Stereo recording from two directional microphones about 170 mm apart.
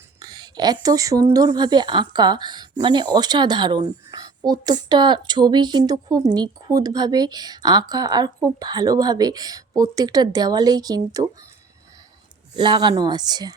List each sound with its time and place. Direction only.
0.2 s speech: 25° right (ahead or behind)
12.5 s speech: 25° right (ahead or behind)